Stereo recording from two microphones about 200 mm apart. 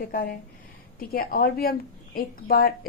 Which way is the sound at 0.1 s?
45° left (ahead or behind).